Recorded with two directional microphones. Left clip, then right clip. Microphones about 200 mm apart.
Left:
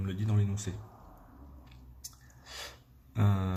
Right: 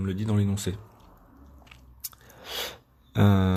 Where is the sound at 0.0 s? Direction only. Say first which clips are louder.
Right 8 dB; 40° right (ahead or behind).